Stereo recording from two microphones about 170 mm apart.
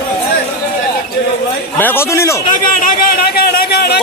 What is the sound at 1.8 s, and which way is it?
Speech, 10° left (ahead or behind).